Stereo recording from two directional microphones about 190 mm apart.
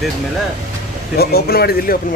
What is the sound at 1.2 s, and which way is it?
Speech, 55° left (ahead or behind).